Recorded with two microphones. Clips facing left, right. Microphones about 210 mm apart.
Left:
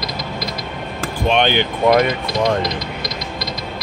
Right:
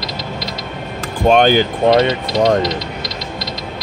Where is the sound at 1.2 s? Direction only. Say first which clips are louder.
Right 6 dB; 40° right (ahead or behind).